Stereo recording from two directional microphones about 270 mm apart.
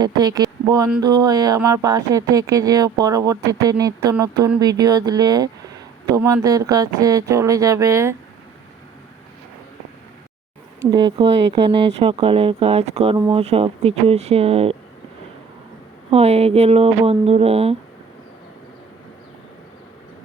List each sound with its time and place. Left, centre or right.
0.0 s speech: centre
10.8 s speech: centre
16.0 s speech: right